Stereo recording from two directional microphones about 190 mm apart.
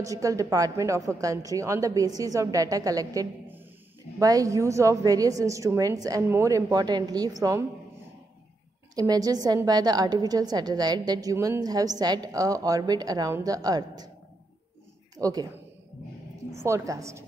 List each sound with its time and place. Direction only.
0.0 s a woman's voice: 15° right (ahead or behind)
8.9 s a woman's voice: 20° right (ahead or behind)
15.1 s speech: 20° right (ahead or behind)
16.5 s a woman's voice: 15° right (ahead or behind)